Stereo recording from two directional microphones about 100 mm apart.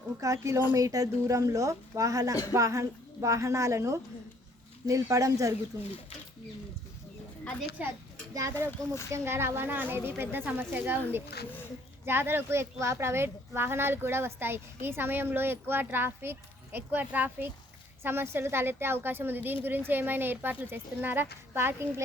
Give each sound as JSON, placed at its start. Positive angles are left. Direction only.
{"t": 0.2, "sound": "a woman's voice", "side_deg": -30}
{"t": 7.8, "sound": "a child's voice", "side_deg": -15}
{"t": 8.3, "sound": "a woman's voice", "side_deg": -35}
{"t": 12.0, "sound": "speech", "side_deg": -25}